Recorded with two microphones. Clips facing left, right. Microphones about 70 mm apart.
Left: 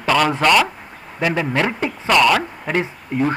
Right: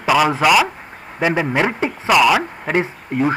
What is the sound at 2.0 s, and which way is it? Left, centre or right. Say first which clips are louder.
A woman's voice: right 1 dB; centre.